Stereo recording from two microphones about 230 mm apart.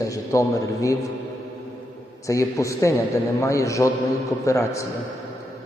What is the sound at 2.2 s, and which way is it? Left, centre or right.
A man's voice, centre.